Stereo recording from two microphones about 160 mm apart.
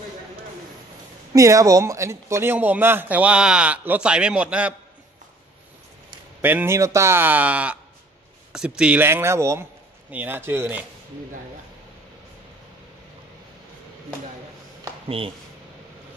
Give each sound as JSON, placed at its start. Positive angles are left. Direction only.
{"t": 1.3, "sound": "speech", "side_deg": -20}
{"t": 6.4, "sound": "speech", "side_deg": -15}
{"t": 15.0, "sound": "speech", "side_deg": -35}